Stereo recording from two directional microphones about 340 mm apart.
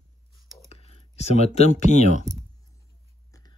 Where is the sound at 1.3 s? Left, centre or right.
Centre.